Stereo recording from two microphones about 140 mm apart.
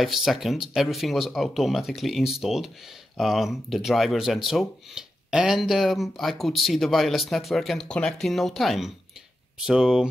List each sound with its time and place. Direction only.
0.0 s speech: centre (ahead or behind)